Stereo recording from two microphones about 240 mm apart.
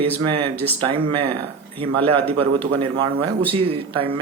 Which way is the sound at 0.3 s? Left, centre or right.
Right.